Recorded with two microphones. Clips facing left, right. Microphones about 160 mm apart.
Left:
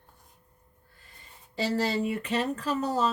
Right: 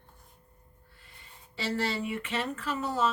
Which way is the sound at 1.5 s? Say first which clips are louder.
Left 4 dB; 40° left (ahead or behind).